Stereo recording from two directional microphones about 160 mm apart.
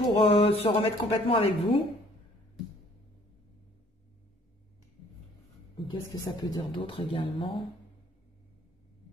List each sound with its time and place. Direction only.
0.0 s speech: 35° left (ahead or behind)
5.9 s speech: 25° left (ahead or behind)